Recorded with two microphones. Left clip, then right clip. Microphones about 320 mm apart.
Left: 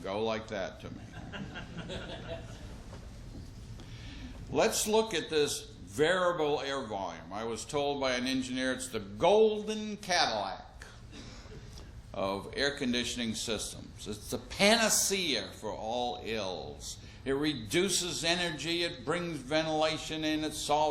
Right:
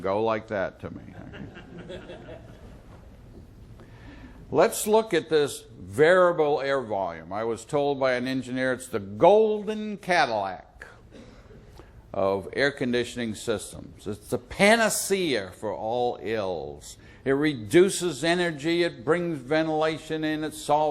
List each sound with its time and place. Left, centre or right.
0.0 s speech: right
4.5 s speech: right
12.1 s a man's voice: right